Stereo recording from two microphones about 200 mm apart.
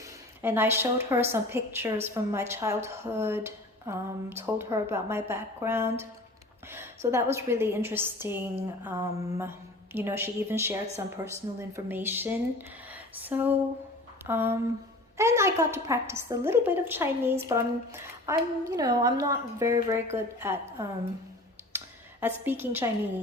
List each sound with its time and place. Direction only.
0.0 s a woman's voice: 10° right (ahead or behind)
22.2 s a woman's voice: 10° right (ahead or behind)